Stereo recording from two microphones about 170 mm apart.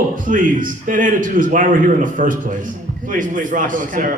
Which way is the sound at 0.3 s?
50° right (ahead or behind).